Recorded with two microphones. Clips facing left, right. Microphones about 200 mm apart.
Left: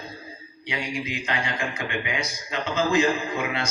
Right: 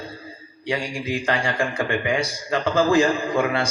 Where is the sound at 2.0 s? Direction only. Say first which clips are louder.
Right 7 dB; 45° right (ahead or behind).